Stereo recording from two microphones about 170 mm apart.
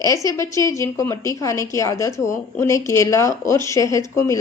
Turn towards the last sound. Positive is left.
turn(degrees=15)  # may be behind; listen again after turning